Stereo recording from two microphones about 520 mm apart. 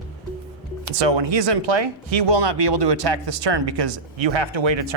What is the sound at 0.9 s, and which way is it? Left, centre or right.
Speech, right.